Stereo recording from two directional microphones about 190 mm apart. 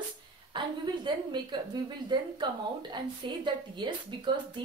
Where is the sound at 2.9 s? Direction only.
25° right (ahead or behind).